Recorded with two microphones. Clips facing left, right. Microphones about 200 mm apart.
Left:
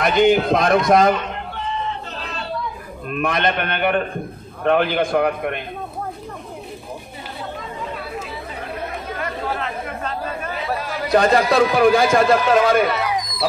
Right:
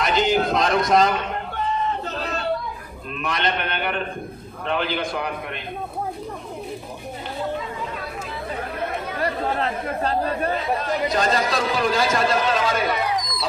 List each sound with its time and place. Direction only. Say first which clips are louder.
0.0 s a man's voice: left 5 dB; 55° left (ahead or behind)
3.1 s a man's voice: left 5 dB; 55° left (ahead or behind)
9.2 s speech: right 3 dB; 35° right (ahead or behind)
11.1 s a man's voice: left 8 dB; 60° left (ahead or behind)